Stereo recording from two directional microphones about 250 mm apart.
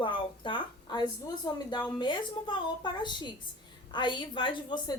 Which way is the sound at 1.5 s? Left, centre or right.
Centre.